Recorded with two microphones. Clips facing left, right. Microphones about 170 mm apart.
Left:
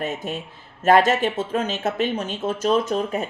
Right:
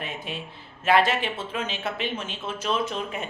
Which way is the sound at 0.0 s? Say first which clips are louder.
Left 7 dB; 45° left (ahead or behind).